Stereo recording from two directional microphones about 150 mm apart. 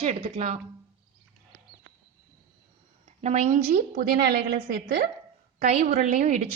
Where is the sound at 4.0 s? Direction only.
90° right.